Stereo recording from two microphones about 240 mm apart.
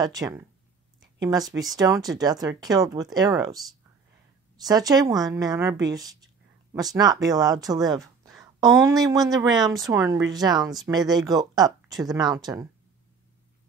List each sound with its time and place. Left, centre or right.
0.0 s speech: centre
8.0 s a sound: centre
8.5 s speech: centre